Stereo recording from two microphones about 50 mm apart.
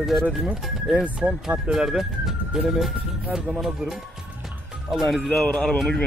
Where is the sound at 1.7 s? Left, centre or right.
Centre.